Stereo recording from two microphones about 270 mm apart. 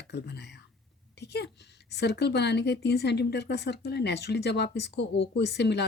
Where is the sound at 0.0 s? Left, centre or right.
Left.